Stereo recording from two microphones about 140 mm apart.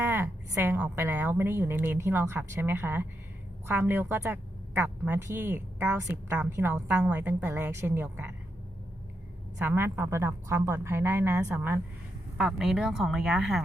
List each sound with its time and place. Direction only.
0.0 s a woman's voice: 15° right (ahead or behind)
9.6 s a woman's voice: 15° right (ahead or behind)
12.4 s speech: 5° right (ahead or behind)